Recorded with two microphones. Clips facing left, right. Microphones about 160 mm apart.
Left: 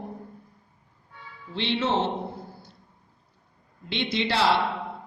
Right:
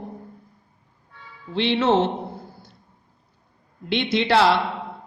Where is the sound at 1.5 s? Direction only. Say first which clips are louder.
Right 6 dB; 65° right (ahead or behind).